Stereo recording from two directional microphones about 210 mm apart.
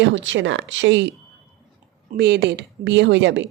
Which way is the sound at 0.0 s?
65° right (ahead or behind).